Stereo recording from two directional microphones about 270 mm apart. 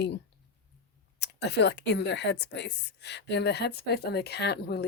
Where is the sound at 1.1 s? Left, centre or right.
Left.